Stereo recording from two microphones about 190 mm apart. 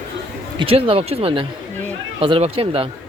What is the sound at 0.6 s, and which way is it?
Speech, 30° right (ahead or behind).